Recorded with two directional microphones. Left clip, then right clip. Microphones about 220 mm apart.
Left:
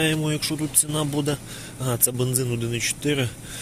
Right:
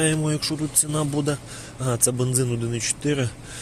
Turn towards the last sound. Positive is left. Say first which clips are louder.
# left 1 dB
turn(degrees=-15)  # may be behind; listen again after turning